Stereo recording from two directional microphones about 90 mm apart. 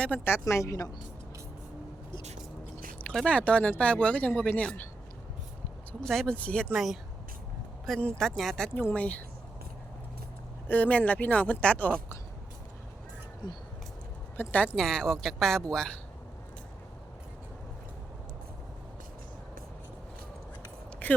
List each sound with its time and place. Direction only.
0.3 s speech: 30° left (ahead or behind)
3.0 s speech: 10° left (ahead or behind)
6.1 s speech: 5° left (ahead or behind)
6.7 s speech: 5° right (ahead or behind)
7.9 s speech: 5° left (ahead or behind)
8.7 s speech: 20° left (ahead or behind)
10.7 s speech: 15° left (ahead or behind)
14.4 s speech: 20° left (ahead or behind)
14.8 s speech: 5° left (ahead or behind)
21.0 s a sound: 20° left (ahead or behind)